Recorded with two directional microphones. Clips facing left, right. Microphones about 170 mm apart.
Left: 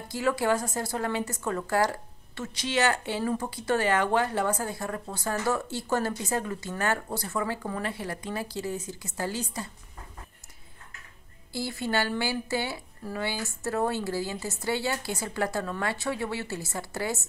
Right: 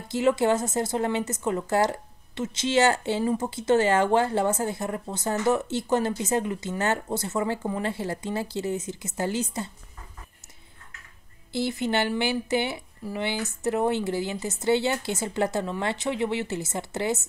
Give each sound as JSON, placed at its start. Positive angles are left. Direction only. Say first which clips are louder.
{"t": 0.1, "sound": "a woman's voice", "louder": "right 4 dB", "side_deg": -20}
{"t": 11.5, "sound": "a woman's voice", "louder": "right 4 dB", "side_deg": -20}